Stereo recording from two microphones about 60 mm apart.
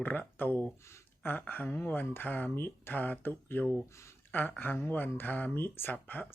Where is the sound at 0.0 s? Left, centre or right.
Left.